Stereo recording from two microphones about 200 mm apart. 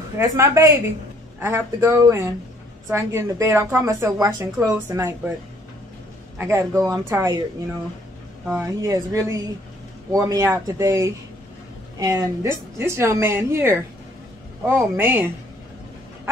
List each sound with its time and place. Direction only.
0.2 s a woman's voice: 15° right (ahead or behind)
6.3 s a woman's voice: 15° right (ahead or behind)
8.5 s a woman's voice: 15° right (ahead or behind)